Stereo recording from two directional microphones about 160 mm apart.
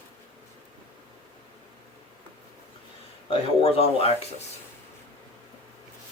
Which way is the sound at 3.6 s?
40° left (ahead or behind).